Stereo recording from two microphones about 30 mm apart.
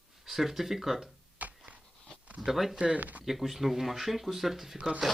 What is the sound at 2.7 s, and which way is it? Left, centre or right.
Speech, right.